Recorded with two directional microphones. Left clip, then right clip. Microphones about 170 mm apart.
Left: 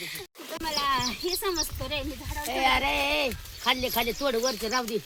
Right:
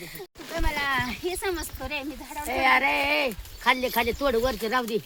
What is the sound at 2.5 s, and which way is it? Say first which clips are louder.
Speech: right 3 dB; 15° left (ahead or behind).